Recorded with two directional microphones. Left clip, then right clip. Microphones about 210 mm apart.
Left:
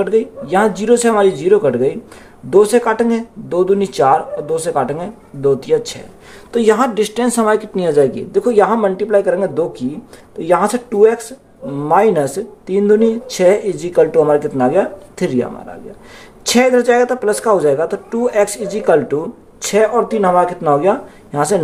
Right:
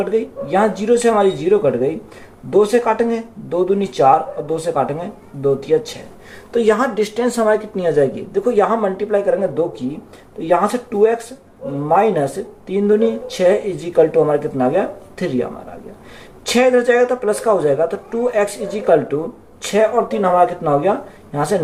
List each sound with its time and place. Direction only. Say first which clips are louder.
0.5 s speech: left 2 dB; 45° left (ahead or behind)
16.5 s speech: left 2 dB; 45° left (ahead or behind)